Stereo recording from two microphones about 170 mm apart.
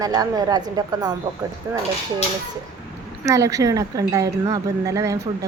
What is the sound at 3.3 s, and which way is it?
Speech, 20° right (ahead or behind).